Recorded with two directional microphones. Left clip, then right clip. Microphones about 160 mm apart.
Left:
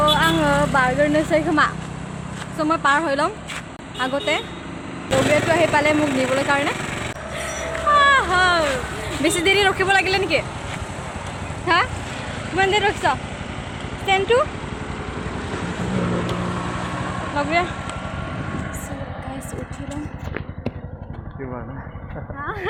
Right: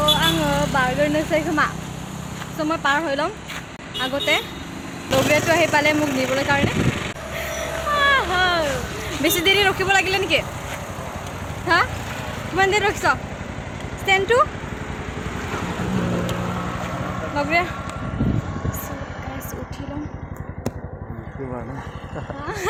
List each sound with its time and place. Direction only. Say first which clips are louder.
0.0 s vehicle: left 2 dB; 10° left (ahead or behind)
2.6 s speech: left 2 dB; 5° left (ahead or behind)
5.1 s speech: even; 65° left (ahead or behind)
5.7 s speech: even; 5° left (ahead or behind)
6.0 s speech: left 1 dB; 75° left (ahead or behind); by 6.5 s 90° left
6.6 s a sound: even; 90° left
7.3 s a sound: even; centre (ahead or behind)
11.6 s speech: even; 15° left (ahead or behind)
12.5 s speech: even; centre (ahead or behind)
17.3 s speech: even; 5° right (ahead or behind)